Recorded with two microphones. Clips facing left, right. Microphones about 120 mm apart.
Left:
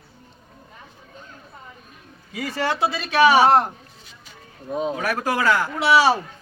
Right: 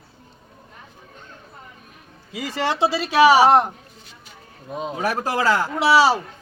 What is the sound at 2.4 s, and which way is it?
Speech, 25° right (ahead or behind).